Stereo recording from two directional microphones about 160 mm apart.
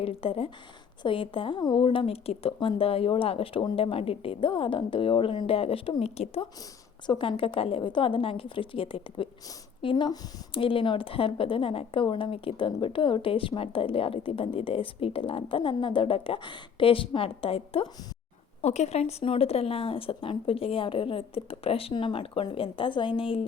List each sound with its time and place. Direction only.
0.0 s speech: 35° left (ahead or behind)